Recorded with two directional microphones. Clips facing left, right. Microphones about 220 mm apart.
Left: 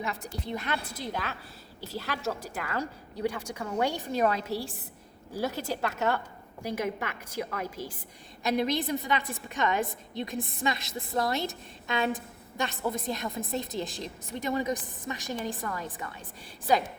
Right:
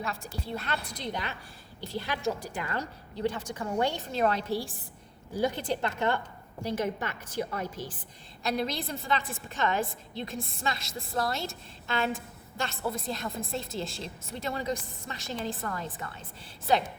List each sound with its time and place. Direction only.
0.0 s a woman's voice: 20° left (ahead or behind)
5.4 s a woman's voice: 5° left (ahead or behind)